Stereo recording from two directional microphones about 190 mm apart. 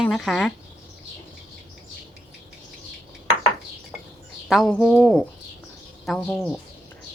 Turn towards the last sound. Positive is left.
turn(degrees=5)  # may be behind; listen again after turning